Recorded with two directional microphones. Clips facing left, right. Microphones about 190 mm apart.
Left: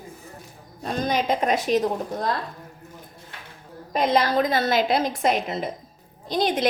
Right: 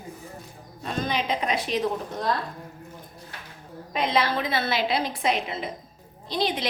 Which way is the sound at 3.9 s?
45° left (ahead or behind).